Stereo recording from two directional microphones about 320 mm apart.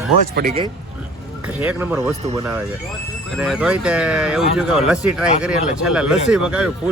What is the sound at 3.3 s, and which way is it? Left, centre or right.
Speech, centre.